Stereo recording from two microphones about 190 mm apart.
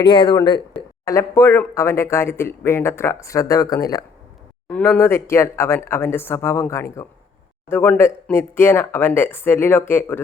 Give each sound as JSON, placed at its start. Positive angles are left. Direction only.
{"t": 0.0, "sound": "speech", "side_deg": 25}